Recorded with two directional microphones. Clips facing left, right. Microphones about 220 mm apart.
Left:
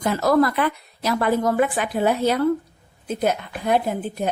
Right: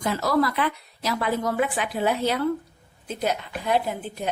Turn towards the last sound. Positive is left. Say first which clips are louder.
# left 5 dB
turn(degrees=50)  # may be behind; listen again after turning